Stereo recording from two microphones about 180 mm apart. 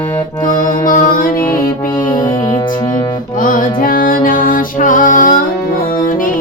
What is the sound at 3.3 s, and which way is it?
Music, 50° left (ahead or behind).